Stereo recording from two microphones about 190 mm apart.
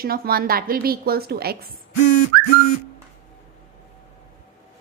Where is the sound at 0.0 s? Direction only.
50° right (ahead or behind).